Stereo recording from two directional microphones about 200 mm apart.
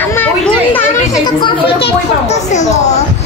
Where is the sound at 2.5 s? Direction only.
35° left (ahead or behind).